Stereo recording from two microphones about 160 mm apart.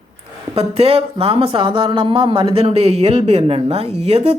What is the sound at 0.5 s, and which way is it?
A woman's voice, 40° right (ahead or behind).